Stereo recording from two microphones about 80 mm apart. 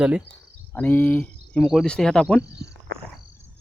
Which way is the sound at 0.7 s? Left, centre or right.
Centre.